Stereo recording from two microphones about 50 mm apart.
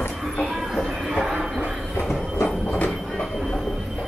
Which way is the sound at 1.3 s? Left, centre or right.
Centre.